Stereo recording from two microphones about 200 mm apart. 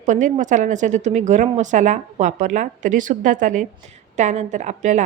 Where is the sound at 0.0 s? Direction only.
40° right (ahead or behind).